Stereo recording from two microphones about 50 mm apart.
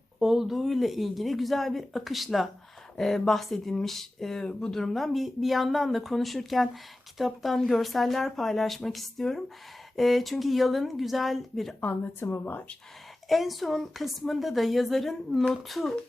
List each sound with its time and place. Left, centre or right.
0.2 s a woman's voice: centre
11.8 s speech: left
13.2 s a woman's voice: centre